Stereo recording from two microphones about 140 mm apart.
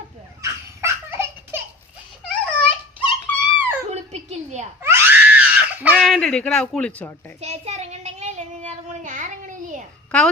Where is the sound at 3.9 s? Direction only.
50° right (ahead or behind).